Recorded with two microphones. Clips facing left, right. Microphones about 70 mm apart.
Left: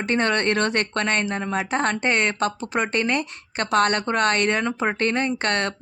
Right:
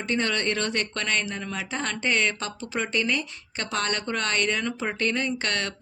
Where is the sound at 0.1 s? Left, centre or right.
Left.